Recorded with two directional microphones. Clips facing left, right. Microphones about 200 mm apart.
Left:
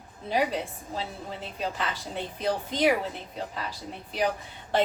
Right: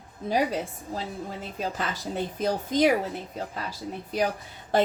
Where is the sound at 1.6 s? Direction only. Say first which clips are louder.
Right 1 dB; 45° right (ahead or behind).